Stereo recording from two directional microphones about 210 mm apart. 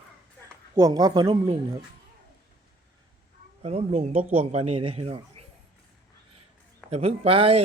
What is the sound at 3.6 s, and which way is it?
Speech, 30° right (ahead or behind).